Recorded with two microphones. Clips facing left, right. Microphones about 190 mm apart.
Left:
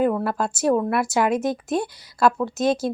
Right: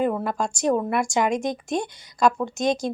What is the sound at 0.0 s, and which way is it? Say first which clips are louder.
Speech: left 2 dB; centre (ahead or behind).